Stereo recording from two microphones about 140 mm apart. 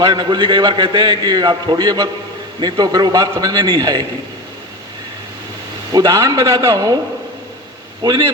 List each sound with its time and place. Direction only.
0.0 s a man's voice: 30° right (ahead or behind)
5.9 s a man's voice: 25° right (ahead or behind)
8.0 s a man's voice: 30° right (ahead or behind)